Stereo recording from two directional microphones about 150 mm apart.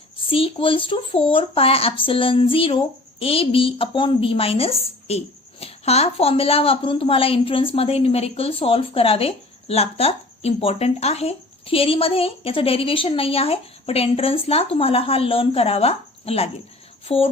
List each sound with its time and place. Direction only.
0.3 s speech: 35° left (ahead or behind)